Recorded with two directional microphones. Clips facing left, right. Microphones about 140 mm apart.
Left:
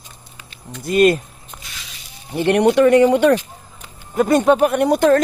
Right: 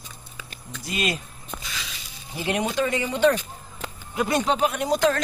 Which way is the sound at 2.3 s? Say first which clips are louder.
Left 11 dB; 65° left (ahead or behind).